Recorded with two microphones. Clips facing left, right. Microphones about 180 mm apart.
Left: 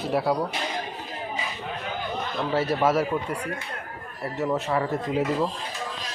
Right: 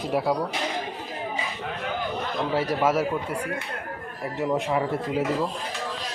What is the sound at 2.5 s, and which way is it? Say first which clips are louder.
Speech: left 1 dB; 15° right (ahead or behind).